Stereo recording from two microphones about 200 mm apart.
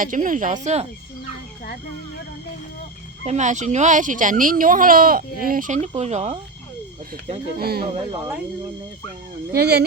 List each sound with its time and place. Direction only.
0.0 s speech: 40° right (ahead or behind)
3.2 s speech: 35° right (ahead or behind)
7.6 s speech: 50° right (ahead or behind)
9.5 s speech: 55° right (ahead or behind)